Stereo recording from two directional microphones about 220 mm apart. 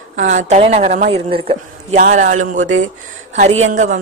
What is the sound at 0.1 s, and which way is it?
A woman's voice, 35° right (ahead or behind).